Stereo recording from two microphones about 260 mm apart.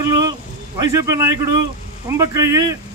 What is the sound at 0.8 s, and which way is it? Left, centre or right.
A man's voice, centre.